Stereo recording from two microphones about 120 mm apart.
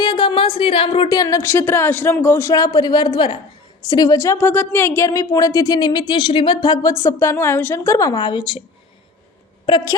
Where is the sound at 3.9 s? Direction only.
30° left (ahead or behind).